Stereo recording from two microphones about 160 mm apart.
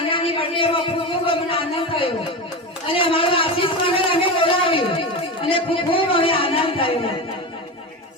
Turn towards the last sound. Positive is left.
turn(degrees=35)  # may be behind; listen again after turning